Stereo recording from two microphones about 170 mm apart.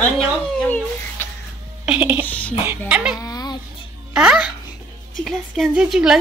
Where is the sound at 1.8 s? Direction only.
10° right (ahead or behind).